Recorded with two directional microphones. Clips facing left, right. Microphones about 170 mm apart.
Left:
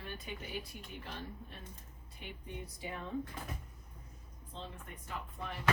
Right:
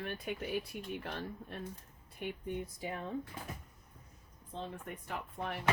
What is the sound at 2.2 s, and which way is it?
Speech, 50° right (ahead or behind).